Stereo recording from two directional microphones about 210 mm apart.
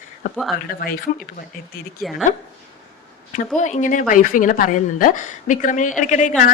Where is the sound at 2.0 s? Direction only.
Centre (ahead or behind).